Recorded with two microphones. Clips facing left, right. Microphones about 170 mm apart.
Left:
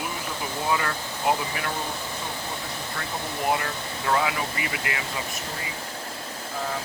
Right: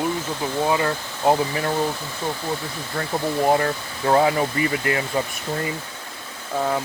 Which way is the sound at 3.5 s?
40° right (ahead or behind).